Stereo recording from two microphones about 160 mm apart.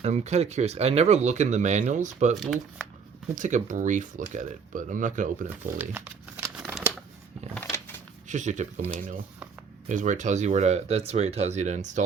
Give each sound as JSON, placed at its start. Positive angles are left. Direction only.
{"t": 0.0, "sound": "speech", "side_deg": -45}
{"t": 2.4, "sound": "speech", "side_deg": -5}
{"t": 3.3, "sound": "speech", "side_deg": -50}
{"t": 5.7, "sound": "speech", "side_deg": -10}
{"t": 8.3, "sound": "speech", "side_deg": -50}